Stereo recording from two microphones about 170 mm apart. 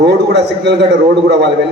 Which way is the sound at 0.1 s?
90° right.